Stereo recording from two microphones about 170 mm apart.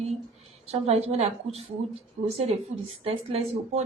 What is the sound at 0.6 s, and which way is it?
Speech, 40° right (ahead or behind).